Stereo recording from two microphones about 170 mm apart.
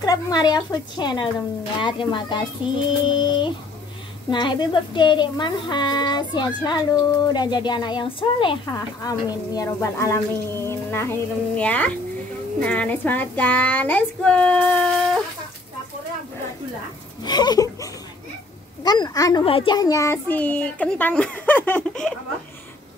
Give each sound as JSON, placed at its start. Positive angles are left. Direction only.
{"t": 0.0, "sound": "speech", "side_deg": 20}
{"t": 17.2, "sound": "speech", "side_deg": 25}
{"t": 18.9, "sound": "speech", "side_deg": 25}
{"t": 19.4, "sound": "speech", "side_deg": 30}